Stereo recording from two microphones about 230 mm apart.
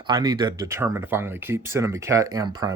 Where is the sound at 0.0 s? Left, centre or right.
Centre.